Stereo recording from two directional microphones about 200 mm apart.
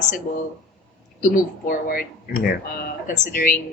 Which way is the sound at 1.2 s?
45° left (ahead or behind).